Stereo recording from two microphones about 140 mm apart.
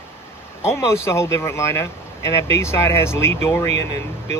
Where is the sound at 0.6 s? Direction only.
20° left (ahead or behind).